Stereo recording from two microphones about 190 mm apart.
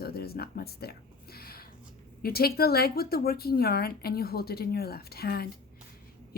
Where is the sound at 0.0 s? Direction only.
55° left (ahead or behind).